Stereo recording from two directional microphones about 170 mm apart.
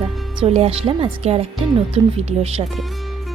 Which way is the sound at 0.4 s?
35° right (ahead or behind).